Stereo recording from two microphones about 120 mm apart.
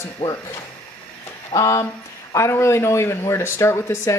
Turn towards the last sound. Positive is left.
turn(degrees=20)  # may be behind; listen again after turning